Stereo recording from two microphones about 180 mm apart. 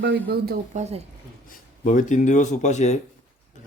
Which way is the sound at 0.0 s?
65° right (ahead or behind).